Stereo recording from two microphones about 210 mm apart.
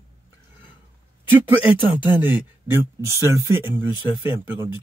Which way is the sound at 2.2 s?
10° right (ahead or behind).